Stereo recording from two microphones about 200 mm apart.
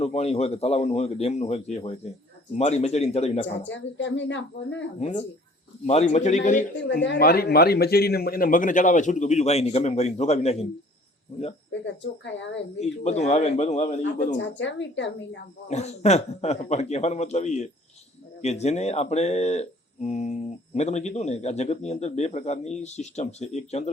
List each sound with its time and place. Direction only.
0.0 s speech: 30° left (ahead or behind)
3.4 s speech: 65° left (ahead or behind)
4.9 s speech: 30° left (ahead or behind)
6.9 s speech: 55° left (ahead or behind); by 11.5 s 35° left (ahead or behind)
12.8 s speech: 35° left (ahead or behind)
14.3 s speech: 65° left (ahead or behind)
15.7 s speech: 35° left (ahead or behind)